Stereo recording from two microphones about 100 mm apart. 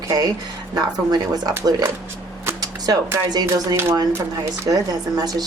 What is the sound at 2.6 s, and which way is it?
Music, 40° right (ahead or behind).